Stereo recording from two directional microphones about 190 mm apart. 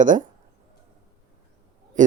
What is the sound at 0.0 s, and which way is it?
Speech, 40° right (ahead or behind).